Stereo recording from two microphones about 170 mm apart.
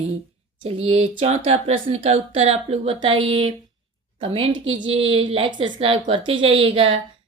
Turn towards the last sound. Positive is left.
turn(degrees=-35)  # may be behind; listen again after turning